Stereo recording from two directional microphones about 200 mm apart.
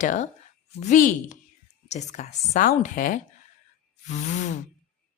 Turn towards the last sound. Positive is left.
turn(degrees=35)  # may be behind; listen again after turning